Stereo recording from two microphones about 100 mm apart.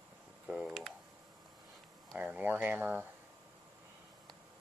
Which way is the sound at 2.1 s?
15° right (ahead or behind).